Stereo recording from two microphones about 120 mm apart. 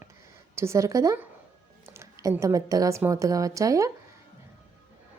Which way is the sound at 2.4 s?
30° right (ahead or behind).